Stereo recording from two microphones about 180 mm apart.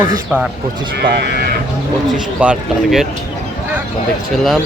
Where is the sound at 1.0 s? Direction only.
60° right (ahead or behind).